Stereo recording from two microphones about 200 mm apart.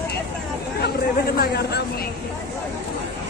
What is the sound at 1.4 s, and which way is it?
Speech, 55° left (ahead or behind).